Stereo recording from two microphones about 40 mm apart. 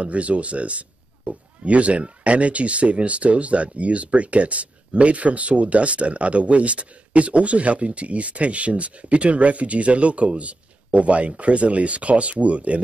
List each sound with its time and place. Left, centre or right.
0.0 s speech: right